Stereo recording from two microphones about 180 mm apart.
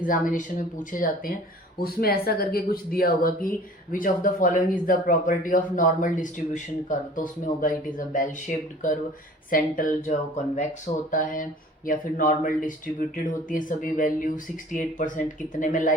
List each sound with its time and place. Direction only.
0.0 s speech: 50° left (ahead or behind)